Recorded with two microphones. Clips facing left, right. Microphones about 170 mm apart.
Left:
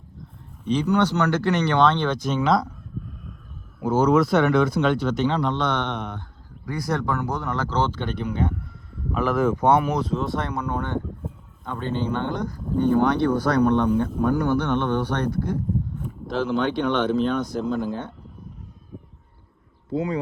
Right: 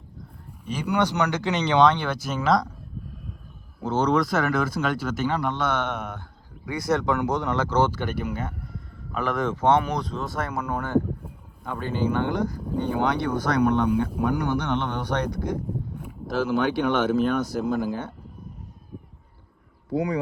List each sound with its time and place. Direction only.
0.6 s speech: 10° right (ahead or behind)
3.8 s speech: 10° left (ahead or behind)
7.0 s speech: 15° right (ahead or behind)
19.9 s speech: 25° left (ahead or behind)